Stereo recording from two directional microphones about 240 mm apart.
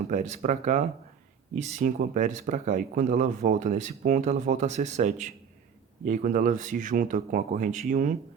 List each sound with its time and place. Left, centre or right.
0.1 s speech: right